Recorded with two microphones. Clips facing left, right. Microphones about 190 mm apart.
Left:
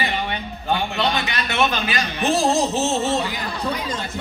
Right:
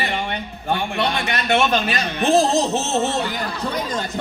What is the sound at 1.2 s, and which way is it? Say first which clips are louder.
Speech: right 6 dB; 50° right (ahead or behind).